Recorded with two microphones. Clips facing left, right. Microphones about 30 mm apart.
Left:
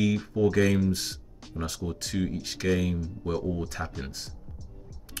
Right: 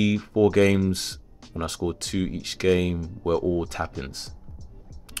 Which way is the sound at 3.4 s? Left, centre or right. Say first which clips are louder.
Right 6 dB; right.